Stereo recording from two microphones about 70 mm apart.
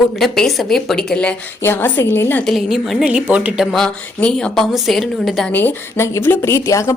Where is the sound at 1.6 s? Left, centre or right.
Left.